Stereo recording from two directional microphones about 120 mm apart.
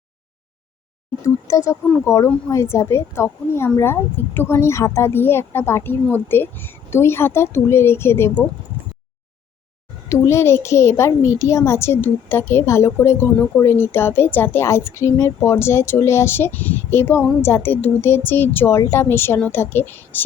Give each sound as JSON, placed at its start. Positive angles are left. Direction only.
{"t": 1.2, "sound": "a woman's voice", "side_deg": 25}
{"t": 10.1, "sound": "a woman's voice", "side_deg": 20}